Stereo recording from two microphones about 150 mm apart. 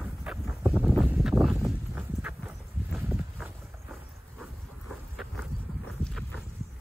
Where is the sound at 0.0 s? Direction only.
5° right (ahead or behind).